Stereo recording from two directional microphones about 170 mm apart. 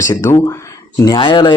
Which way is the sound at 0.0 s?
15° left (ahead or behind).